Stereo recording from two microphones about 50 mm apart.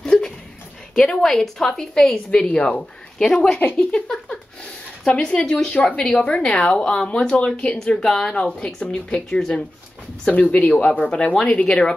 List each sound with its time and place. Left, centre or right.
0.0 s a sound: centre
1.1 s a woman's voice: centre
2.3 s speech: left
3.2 s a woman's voice: centre
10.5 s speech: left